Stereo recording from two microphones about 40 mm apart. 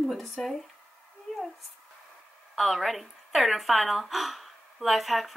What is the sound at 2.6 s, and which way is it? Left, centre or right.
Speech, centre.